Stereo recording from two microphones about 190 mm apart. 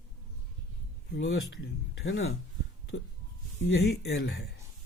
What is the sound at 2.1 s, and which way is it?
Speech, 80° left.